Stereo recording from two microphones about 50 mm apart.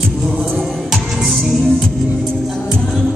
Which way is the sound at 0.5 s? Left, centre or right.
Centre.